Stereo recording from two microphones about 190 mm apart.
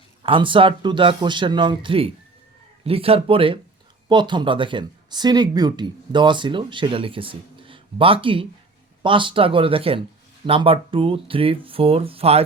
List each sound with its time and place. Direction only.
0.2 s speech: 25° right (ahead or behind)